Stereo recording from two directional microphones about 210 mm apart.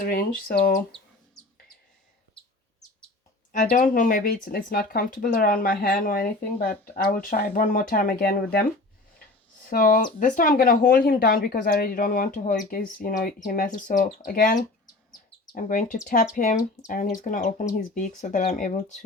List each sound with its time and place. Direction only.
0.1 s speech: 45° left (ahead or behind)
3.5 s speech: 40° left (ahead or behind)
9.6 s speech: 40° left (ahead or behind)